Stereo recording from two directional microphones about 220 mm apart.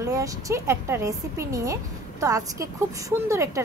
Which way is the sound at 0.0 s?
15° right (ahead or behind).